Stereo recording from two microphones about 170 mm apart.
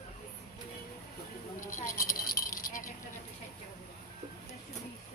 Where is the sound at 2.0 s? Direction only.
55° left (ahead or behind).